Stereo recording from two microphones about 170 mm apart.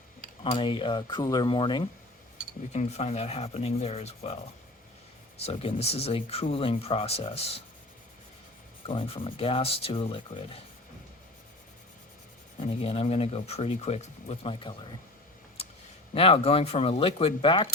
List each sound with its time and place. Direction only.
0.5 s speech: 30° left (ahead or behind)
2.7 s speech: 40° left (ahead or behind)
5.4 s speech: 35° left (ahead or behind)
8.9 s speech: 30° left (ahead or behind)
12.6 s speech: 35° left (ahead or behind)
16.1 s speech: 35° left (ahead or behind)